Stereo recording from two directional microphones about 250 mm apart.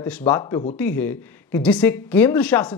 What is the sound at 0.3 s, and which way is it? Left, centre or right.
A man's voice, centre.